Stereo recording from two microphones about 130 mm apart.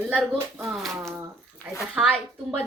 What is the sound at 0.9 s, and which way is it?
Speech, 20° right (ahead or behind).